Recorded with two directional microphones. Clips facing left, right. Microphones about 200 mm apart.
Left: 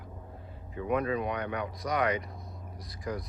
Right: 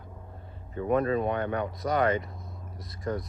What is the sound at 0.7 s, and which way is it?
Speech, 45° right (ahead or behind).